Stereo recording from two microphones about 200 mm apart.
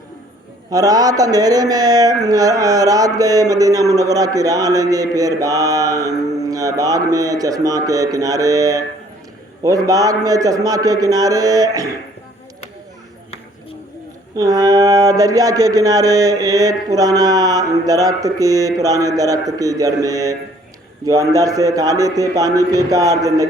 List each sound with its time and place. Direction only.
0.7 s speech: 20° right (ahead or behind)
14.3 s speech: 20° right (ahead or behind)